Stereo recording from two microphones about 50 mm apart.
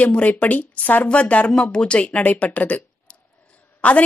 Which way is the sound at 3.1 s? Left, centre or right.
Centre.